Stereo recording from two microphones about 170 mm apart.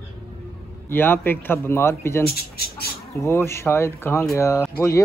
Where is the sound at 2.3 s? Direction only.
65° left (ahead or behind).